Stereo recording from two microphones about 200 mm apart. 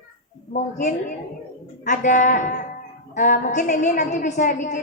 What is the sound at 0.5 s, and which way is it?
A woman's voice, 40° left (ahead or behind).